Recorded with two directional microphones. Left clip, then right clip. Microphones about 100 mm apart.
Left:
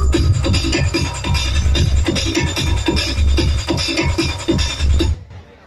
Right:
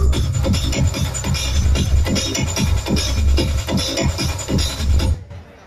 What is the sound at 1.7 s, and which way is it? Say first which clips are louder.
Music: left 4 dB; 25° right (ahead or behind).